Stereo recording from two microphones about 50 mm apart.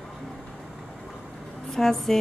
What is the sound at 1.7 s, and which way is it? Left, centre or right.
Speech, centre.